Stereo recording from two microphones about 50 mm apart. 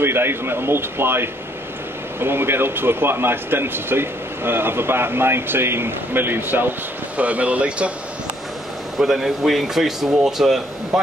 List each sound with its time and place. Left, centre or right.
0.0 s speech: right
7.2 s speech: right
8.9 s speech: centre